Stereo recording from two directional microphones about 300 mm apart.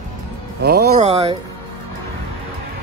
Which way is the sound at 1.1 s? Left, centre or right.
Centre.